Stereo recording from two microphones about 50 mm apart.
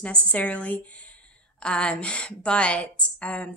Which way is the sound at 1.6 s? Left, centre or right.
Left.